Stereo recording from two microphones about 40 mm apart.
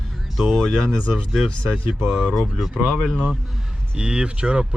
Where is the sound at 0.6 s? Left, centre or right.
Centre.